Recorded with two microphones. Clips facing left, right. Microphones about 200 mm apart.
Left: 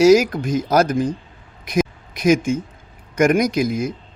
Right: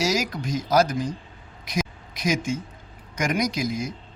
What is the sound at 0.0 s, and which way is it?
Speech, 55° left (ahead or behind).